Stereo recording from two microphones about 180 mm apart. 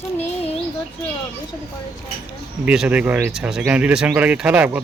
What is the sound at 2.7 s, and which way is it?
Speech, 5° right (ahead or behind).